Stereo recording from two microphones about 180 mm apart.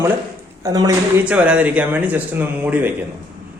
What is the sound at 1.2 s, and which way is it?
A man's voice, 10° right (ahead or behind).